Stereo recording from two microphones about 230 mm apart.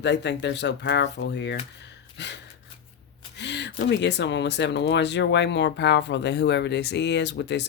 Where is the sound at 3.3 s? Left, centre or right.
Left.